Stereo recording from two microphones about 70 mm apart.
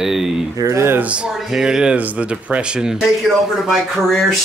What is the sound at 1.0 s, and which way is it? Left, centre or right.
Speech, centre.